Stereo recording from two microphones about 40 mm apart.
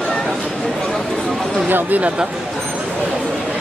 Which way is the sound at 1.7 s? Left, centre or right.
Right.